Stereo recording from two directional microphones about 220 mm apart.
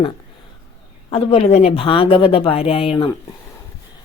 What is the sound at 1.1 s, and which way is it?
A woman's voice, 30° left (ahead or behind).